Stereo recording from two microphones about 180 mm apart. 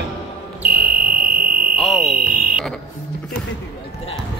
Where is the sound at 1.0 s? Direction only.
55° right (ahead or behind).